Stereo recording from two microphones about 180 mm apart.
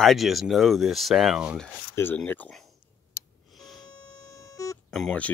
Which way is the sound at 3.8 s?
20° left (ahead or behind).